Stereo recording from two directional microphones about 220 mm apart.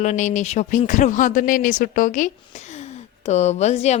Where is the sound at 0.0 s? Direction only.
35° left (ahead or behind).